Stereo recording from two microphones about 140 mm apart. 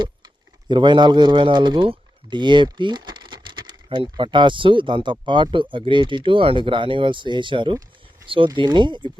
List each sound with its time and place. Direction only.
0.7 s speech: 35° right (ahead or behind)